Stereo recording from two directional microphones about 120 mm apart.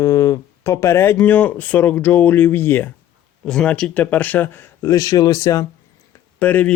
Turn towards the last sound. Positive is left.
turn(degrees=15)  # may be behind; listen again after turning